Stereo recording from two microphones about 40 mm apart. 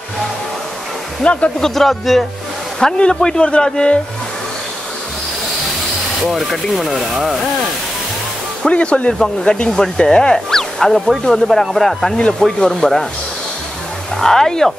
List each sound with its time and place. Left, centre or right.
1.2 s speech: left
1.6 s speech: centre
2.8 s a man's voice: centre
6.2 s speech: centre
8.6 s a man's voice: left
10.5 s speech: centre
14.2 s speech: centre